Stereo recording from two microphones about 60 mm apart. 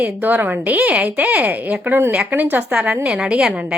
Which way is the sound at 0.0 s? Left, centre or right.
Right.